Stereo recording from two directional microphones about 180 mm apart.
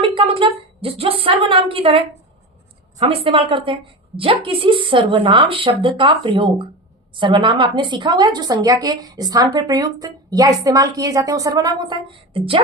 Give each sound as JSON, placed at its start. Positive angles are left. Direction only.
{"t": 0.0, "sound": "a woman's voice", "side_deg": -30}